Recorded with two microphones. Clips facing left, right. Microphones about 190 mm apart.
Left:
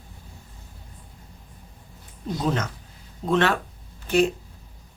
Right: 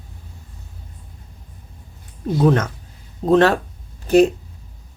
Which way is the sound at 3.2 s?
35° right (ahead or behind).